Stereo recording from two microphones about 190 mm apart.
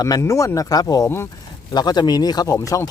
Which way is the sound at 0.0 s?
15° left (ahead or behind).